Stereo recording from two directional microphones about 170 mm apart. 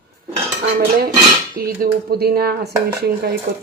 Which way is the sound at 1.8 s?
65° right (ahead or behind).